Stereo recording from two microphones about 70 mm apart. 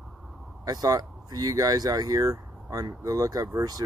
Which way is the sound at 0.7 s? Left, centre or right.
Right.